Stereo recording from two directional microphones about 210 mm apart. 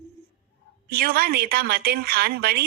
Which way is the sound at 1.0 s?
45° right (ahead or behind).